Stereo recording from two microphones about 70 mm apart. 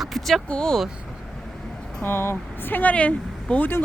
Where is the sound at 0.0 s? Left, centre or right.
Centre.